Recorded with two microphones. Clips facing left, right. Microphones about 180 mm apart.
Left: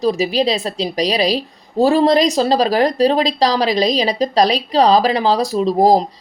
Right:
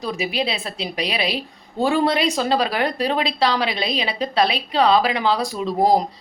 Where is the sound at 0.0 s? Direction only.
35° left (ahead or behind).